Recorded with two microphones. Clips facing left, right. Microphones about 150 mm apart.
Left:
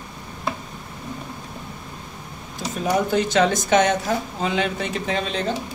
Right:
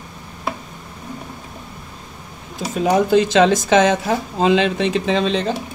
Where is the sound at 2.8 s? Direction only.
90° right.